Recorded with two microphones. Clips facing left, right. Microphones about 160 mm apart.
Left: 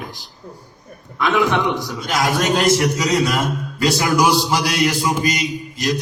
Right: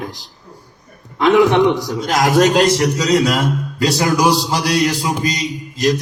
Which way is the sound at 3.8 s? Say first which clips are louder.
Right 1 dB; 40° right (ahead or behind).